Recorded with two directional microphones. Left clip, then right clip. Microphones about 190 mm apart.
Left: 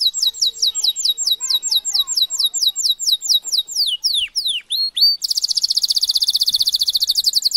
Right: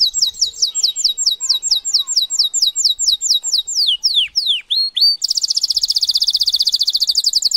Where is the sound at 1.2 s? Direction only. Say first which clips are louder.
Right 2 dB; 15° left (ahead or behind).